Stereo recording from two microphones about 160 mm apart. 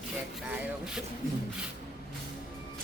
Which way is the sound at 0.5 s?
5° right (ahead or behind).